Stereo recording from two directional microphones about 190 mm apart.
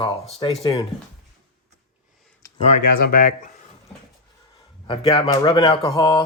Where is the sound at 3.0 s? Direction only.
45° left (ahead or behind).